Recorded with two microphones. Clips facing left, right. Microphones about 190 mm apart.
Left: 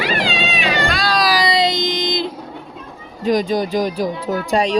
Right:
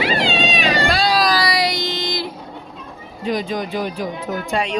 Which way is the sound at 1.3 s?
20° left (ahead or behind).